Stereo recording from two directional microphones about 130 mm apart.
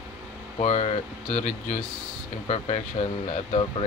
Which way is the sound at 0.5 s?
50° left (ahead or behind).